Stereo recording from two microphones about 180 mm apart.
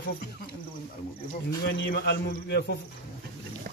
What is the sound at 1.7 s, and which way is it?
Speech, 60° left (ahead or behind).